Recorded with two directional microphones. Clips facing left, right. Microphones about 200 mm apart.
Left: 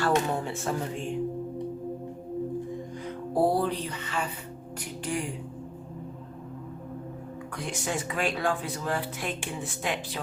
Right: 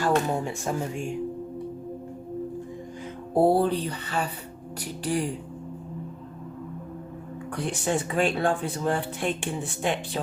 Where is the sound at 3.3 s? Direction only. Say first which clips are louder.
Right 4 dB; 25° right (ahead or behind).